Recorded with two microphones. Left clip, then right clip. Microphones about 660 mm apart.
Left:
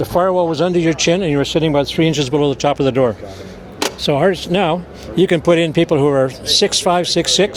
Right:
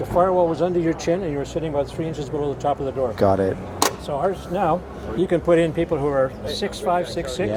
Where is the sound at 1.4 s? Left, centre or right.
Left.